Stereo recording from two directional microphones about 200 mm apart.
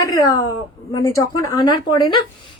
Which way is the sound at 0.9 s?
15° left (ahead or behind).